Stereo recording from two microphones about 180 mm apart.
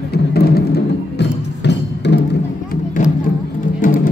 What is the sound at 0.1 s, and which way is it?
Music, 60° left (ahead or behind).